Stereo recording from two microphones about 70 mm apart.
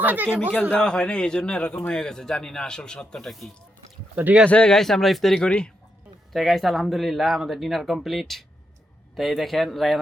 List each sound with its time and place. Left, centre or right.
0.0 s speech: right
0.7 s a man's voice: centre
4.1 s speech: right
4.4 s a man's voice: centre
6.3 s speech: centre